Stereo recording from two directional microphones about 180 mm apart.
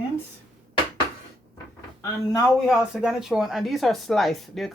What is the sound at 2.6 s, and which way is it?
Speech, 5° right (ahead or behind).